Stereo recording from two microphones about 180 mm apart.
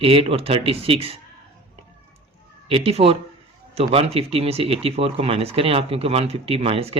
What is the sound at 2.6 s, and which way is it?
Speech, 30° right (ahead or behind).